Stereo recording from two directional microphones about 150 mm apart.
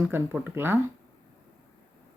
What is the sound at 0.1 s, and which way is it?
Speech, 15° right (ahead or behind).